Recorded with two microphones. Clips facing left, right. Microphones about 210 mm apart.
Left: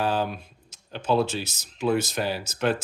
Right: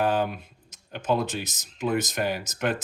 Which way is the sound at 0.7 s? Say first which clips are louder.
Left 1 dB; 15° right (ahead or behind).